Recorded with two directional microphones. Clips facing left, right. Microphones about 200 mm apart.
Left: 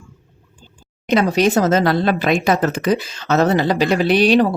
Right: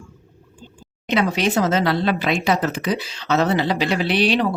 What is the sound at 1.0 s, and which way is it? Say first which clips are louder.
Speech: left 5 dB; 40° left (ahead or behind).